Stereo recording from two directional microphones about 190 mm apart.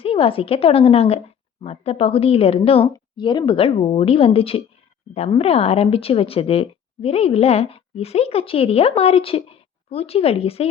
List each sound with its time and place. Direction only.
0.0 s a woman's voice: 30° left (ahead or behind)